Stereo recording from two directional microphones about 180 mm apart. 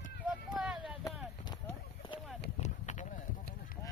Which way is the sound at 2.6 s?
40° left (ahead or behind).